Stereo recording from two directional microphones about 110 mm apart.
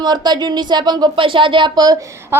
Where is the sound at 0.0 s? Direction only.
40° right (ahead or behind).